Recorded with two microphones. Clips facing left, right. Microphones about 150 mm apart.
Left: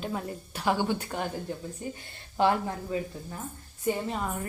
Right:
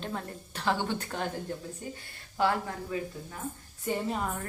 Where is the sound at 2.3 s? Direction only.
20° left (ahead or behind).